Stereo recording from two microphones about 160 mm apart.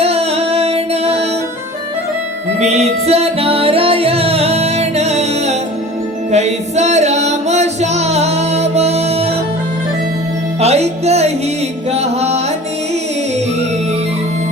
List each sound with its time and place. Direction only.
0.0 s music: 40° right (ahead or behind)
2.6 s music: 45° right (ahead or behind)
10.6 s music: 40° right (ahead or behind)